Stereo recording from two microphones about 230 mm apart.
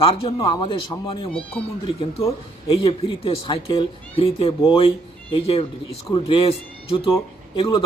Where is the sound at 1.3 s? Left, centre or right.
Centre.